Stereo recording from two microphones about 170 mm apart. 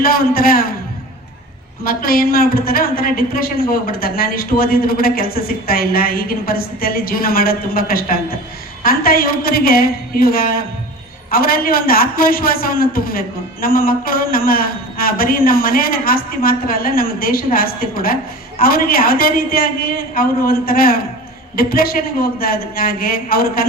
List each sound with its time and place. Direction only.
0.0 s a man's voice: 60° left (ahead or behind)
1.8 s a man's voice: 60° left (ahead or behind)